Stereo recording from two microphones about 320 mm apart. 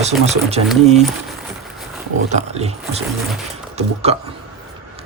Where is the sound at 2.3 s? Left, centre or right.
Centre.